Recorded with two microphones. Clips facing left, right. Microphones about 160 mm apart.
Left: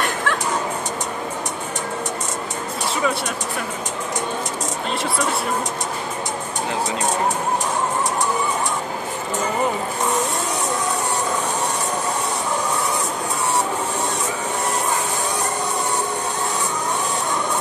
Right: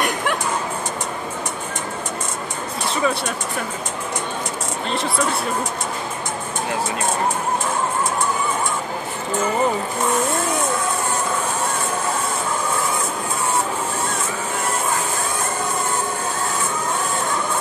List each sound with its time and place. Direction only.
0.0 s music: 15° right (ahead or behind)